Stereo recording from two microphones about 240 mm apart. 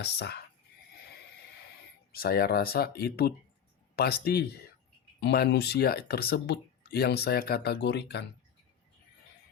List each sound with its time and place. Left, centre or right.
0.0 s speech: left
2.1 s speech: left